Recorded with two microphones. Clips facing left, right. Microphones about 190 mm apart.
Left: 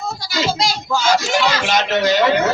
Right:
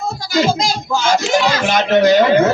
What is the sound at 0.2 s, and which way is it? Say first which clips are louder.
Speech: right 5 dB; 50° right (ahead or behind).